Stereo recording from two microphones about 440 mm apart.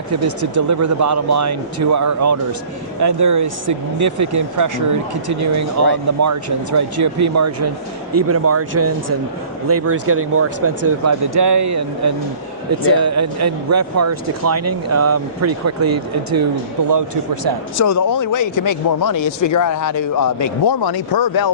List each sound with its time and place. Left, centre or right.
0.1 s speech: right
5.8 s speech: right
17.7 s a man's voice: left